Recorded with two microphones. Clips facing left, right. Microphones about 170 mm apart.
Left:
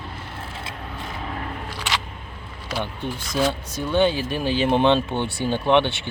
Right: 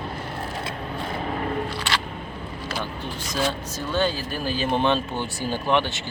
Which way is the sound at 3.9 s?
20° left (ahead or behind).